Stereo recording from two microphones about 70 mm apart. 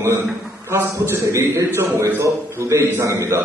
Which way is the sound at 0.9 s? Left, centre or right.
Right.